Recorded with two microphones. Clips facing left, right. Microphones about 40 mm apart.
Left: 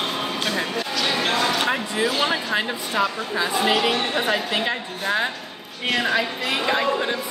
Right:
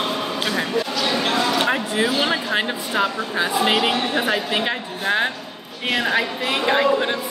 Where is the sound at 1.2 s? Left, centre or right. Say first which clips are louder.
Right 2 dB; centre; by 3.5 s right.